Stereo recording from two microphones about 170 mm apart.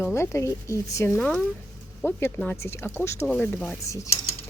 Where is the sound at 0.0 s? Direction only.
15° left (ahead or behind).